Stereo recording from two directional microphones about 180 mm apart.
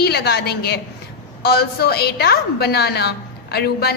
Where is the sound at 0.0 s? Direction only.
65° left (ahead or behind).